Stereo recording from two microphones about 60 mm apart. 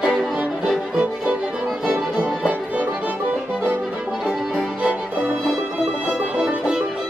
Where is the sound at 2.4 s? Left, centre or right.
Right.